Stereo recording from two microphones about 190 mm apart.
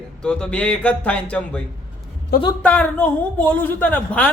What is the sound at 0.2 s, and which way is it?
A man's voice, 5° left (ahead or behind).